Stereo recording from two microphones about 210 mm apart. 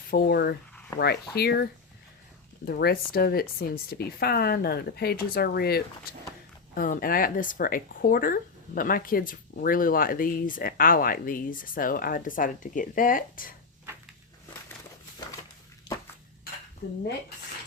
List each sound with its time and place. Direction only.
0.1 s speech: 45° left (ahead or behind)
0.9 s speech: 15° left (ahead or behind)
1.4 s speech: 50° left (ahead or behind)
2.6 s speech: 45° left (ahead or behind)